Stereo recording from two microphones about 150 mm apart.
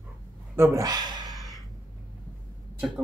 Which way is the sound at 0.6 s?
20° right (ahead or behind).